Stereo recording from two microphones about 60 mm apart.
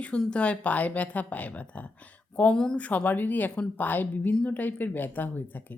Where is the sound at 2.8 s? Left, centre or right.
Left.